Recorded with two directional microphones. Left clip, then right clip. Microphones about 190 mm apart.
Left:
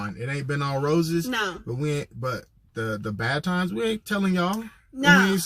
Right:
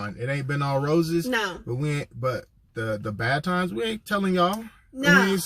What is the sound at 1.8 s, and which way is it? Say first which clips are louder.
Speech: even; 15° left (ahead or behind).